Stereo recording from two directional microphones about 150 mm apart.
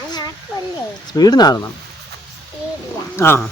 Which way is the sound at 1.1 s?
25° left (ahead or behind).